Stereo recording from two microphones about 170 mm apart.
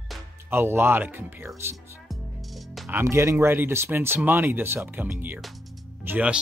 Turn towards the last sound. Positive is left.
turn(degrees=-10)  # may be behind; listen again after turning